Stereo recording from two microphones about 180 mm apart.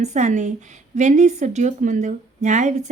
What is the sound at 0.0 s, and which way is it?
A woman's voice, 40° right (ahead or behind).